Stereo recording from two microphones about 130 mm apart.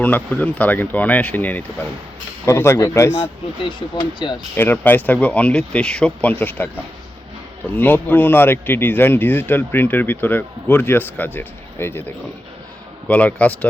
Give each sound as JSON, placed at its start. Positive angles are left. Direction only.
{"t": 0.0, "sound": "speech", "side_deg": 10}
{"t": 3.8, "sound": "speech", "side_deg": 35}
{"t": 4.5, "sound": "speech", "side_deg": 15}
{"t": 7.6, "sound": "speech", "side_deg": 15}